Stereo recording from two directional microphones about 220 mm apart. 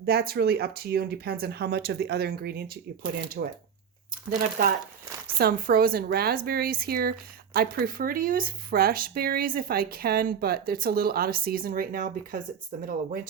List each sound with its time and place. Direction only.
0.0 s speech: 45° right (ahead or behind)